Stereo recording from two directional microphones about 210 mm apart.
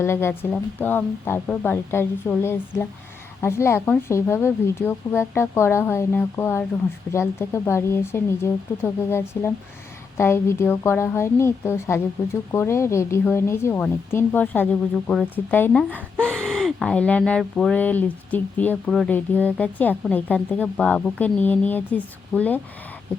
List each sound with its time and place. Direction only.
0.0 s a woman's voice: 10° left (ahead or behind)